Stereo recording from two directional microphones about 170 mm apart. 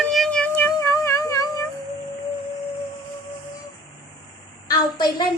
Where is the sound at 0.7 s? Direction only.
20° left (ahead or behind).